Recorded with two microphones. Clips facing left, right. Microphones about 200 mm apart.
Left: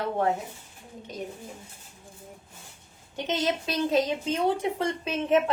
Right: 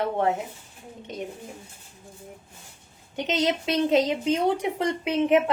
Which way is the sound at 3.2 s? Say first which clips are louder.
Right 3 dB; 20° right (ahead or behind).